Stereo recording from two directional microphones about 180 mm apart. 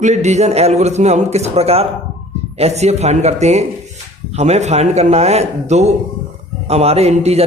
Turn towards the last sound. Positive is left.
turn(degrees=-35)  # may be behind; listen again after turning